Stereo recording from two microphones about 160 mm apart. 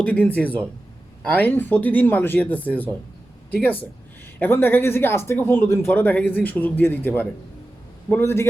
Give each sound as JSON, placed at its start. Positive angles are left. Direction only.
{"t": 0.0, "sound": "speech", "side_deg": 10}